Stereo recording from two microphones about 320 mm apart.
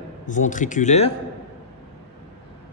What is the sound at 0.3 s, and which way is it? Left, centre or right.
Speech, left.